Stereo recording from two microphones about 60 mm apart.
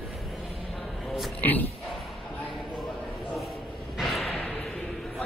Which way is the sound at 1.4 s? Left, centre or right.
Left.